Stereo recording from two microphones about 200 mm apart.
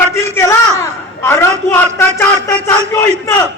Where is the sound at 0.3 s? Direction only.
15° left (ahead or behind).